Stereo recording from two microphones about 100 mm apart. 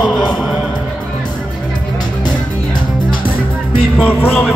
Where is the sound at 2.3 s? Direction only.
50° left (ahead or behind).